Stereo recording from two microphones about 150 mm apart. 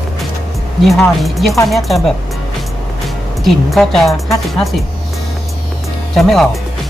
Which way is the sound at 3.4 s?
Centre (ahead or behind).